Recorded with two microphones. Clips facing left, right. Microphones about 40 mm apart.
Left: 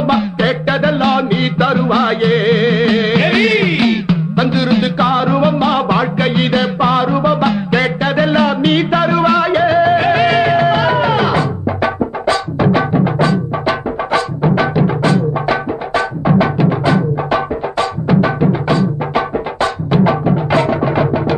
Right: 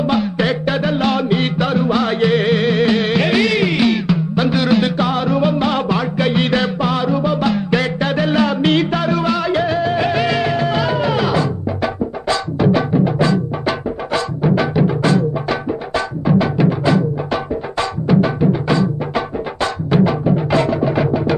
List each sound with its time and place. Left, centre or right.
0.0 s music: left
18.7 s music: centre